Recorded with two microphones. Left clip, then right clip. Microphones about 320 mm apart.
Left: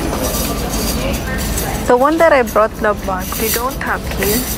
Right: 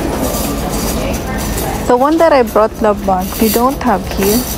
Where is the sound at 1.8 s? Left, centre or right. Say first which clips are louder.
Right 1 dB; centre.